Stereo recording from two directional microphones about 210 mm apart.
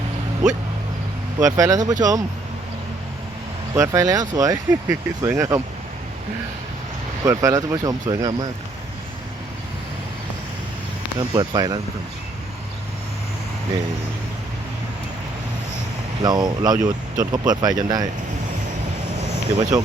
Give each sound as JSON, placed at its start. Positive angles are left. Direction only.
{"t": 1.4, "sound": "speech", "side_deg": -15}
{"t": 3.8, "sound": "speech", "side_deg": -15}
{"t": 7.3, "sound": "speech", "side_deg": -15}
{"t": 11.2, "sound": "speech", "side_deg": -20}
{"t": 16.2, "sound": "speech", "side_deg": -20}
{"t": 19.2, "sound": "vehicle", "side_deg": -35}